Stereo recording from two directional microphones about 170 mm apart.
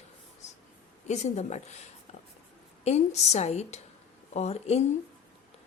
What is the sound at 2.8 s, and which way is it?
A woman's voice, 40° left (ahead or behind).